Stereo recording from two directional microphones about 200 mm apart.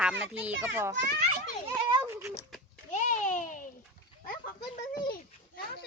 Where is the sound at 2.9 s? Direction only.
40° left (ahead or behind).